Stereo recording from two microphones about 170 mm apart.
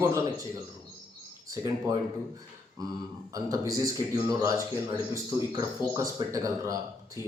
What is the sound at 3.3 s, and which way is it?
Speech, 20° right (ahead or behind).